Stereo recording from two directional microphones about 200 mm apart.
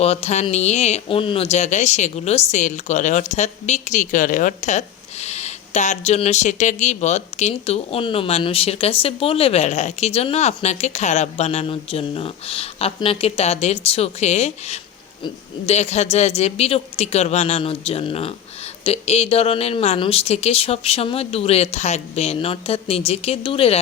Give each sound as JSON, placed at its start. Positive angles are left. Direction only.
{"t": 0.0, "sound": "speech", "side_deg": 30}